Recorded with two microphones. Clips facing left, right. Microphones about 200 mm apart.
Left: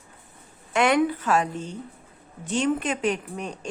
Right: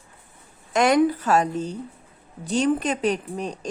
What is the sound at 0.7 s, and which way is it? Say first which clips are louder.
Speech: right 3 dB; 40° right (ahead or behind).